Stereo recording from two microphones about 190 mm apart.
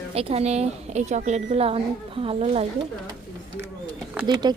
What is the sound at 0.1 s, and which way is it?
A woman's voice, 30° right (ahead or behind).